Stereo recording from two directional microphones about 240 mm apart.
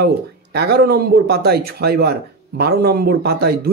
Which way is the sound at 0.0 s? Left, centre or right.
Right.